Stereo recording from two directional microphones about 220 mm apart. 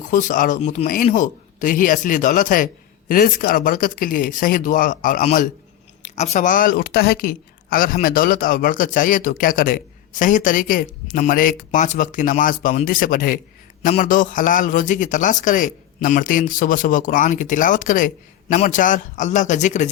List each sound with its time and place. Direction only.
0.1 s a woman's voice: 35° left (ahead or behind)